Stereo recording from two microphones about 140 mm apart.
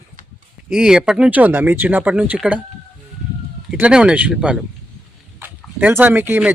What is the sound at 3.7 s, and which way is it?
Speech, 5° right (ahead or behind).